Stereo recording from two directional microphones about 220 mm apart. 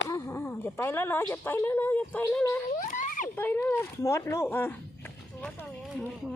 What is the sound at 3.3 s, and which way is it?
Speech, 10° left (ahead or behind).